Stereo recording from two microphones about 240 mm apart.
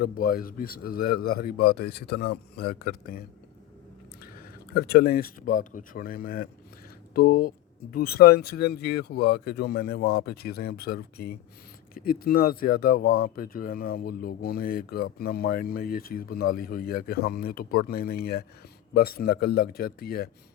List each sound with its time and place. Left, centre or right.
0.0 s speech: left